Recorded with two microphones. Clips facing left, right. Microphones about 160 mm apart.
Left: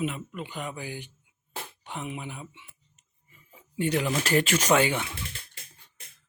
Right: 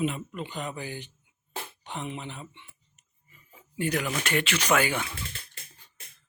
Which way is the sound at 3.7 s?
25° left (ahead or behind).